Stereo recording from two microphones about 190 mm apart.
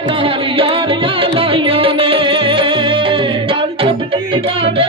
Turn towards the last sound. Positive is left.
turn(degrees=-25)  # may be behind; listen again after turning